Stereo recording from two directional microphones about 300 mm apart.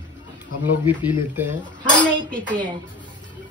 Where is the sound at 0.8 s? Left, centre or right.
Centre.